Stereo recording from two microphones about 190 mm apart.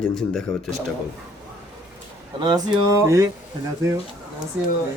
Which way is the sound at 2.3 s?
20° right (ahead or behind).